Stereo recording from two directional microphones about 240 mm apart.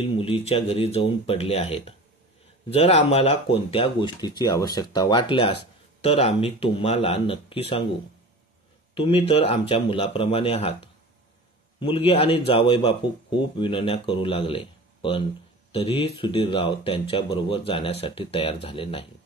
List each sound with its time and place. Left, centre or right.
0.0 s speech: left
8.9 s speech: left